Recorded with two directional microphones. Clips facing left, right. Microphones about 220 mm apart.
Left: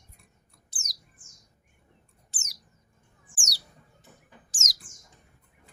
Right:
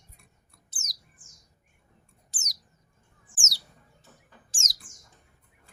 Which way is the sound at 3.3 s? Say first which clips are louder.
Even; 25° right (ahead or behind).